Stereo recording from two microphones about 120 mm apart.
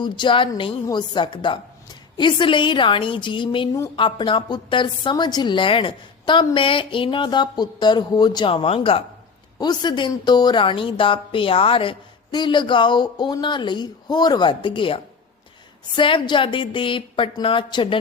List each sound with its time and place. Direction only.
0.0 s a woman's voice: 40° left (ahead or behind)
9.6 s a woman's voice: 35° left (ahead or behind)